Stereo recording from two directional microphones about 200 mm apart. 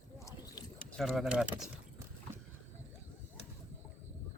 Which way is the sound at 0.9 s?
Centre (ahead or behind).